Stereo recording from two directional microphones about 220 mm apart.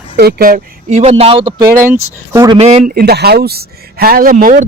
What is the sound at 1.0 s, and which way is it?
Speech, 30° right (ahead or behind).